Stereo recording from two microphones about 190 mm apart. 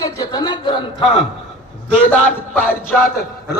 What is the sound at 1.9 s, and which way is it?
Music, 5° left (ahead or behind).